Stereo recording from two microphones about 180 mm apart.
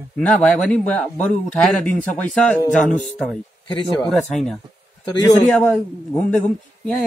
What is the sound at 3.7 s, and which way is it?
Speech, 25° left (ahead or behind).